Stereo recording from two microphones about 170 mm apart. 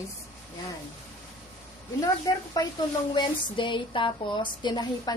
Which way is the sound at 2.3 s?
20° left (ahead or behind).